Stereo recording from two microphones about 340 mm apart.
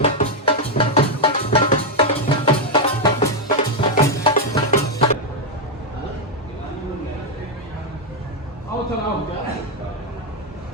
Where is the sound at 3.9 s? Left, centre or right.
Centre.